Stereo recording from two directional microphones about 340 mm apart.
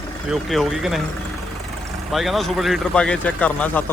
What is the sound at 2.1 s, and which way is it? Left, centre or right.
Speech, centre.